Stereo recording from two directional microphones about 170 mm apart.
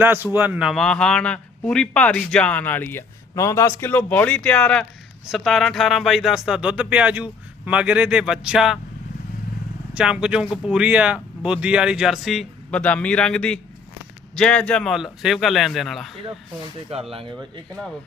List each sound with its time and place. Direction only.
0.0 s a man's voice: 10° right (ahead or behind)
9.9 s speech: 5° right (ahead or behind)
16.9 s speech: 35° right (ahead or behind)